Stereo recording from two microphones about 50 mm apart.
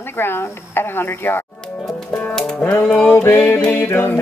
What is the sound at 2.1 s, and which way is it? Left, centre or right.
Music, left.